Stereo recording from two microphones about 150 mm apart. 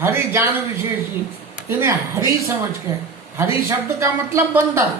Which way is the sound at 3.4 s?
20° right (ahead or behind).